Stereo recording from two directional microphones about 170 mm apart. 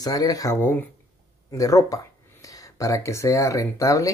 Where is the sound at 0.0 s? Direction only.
20° left (ahead or behind).